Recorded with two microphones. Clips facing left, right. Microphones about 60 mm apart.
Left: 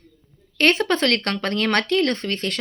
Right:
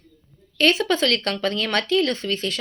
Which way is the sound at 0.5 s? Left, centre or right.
Left.